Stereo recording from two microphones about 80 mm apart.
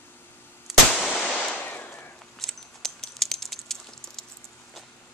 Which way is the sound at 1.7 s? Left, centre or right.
Left.